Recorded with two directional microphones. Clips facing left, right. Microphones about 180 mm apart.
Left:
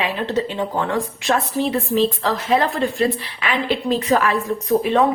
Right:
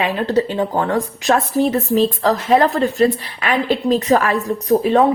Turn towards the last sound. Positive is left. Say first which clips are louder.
# right 3 dB
turn(degrees=-40)  # may be behind; listen again after turning